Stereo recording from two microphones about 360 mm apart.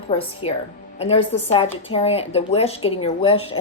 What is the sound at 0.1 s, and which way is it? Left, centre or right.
A woman's voice, centre.